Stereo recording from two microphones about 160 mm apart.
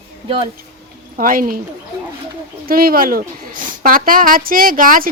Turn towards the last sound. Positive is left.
turn(degrees=-60)  # may be behind; listen again after turning